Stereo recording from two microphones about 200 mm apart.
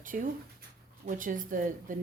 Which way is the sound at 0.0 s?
40° right (ahead or behind).